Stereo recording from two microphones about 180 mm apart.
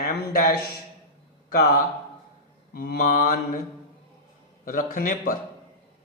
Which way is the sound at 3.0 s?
50° left (ahead or behind).